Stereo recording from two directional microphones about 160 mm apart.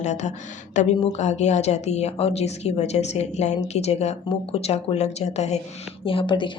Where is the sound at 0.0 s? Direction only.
45° left (ahead or behind).